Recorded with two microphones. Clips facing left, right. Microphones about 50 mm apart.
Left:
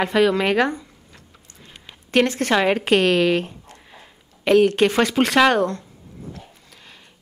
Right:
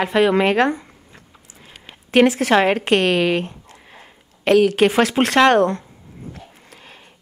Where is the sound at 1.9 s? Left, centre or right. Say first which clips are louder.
Right 4 dB; centre.